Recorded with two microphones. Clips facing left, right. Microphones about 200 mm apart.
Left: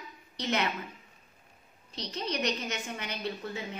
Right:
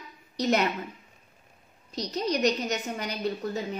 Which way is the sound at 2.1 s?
40° right (ahead or behind).